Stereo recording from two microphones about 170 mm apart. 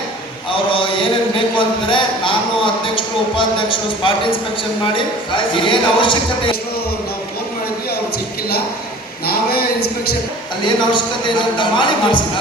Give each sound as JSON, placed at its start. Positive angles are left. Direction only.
{"t": 0.5, "sound": "a sound", "side_deg": 30}
{"t": 5.5, "sound": "speech", "side_deg": 30}
{"t": 9.2, "sound": "speech", "side_deg": 65}
{"t": 10.6, "sound": "speech", "side_deg": 25}